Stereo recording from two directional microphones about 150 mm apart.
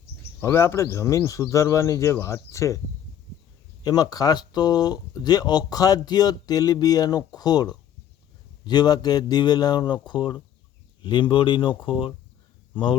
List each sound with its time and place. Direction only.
0.4 s speech: 15° left (ahead or behind)
3.8 s speech: 25° left (ahead or behind)